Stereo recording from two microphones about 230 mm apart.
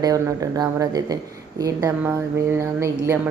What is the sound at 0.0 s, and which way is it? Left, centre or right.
A woman's voice, centre.